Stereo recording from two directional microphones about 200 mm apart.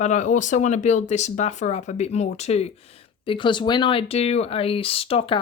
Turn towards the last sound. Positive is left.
turn(degrees=25)  # may be behind; listen again after turning